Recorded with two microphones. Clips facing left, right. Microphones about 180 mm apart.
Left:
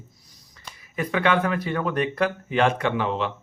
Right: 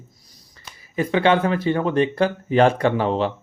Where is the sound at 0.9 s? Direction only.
30° right (ahead or behind).